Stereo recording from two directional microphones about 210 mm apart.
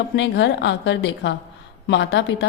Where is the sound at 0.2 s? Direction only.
55° left (ahead or behind).